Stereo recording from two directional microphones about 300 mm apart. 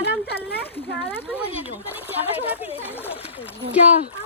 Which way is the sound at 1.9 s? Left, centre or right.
Centre.